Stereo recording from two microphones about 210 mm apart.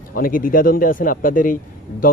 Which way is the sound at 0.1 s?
40° left (ahead or behind).